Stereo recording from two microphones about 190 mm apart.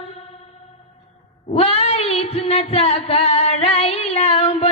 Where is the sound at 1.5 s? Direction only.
30° left (ahead or behind).